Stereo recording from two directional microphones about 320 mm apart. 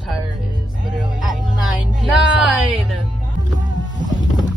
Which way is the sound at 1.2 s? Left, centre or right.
Right.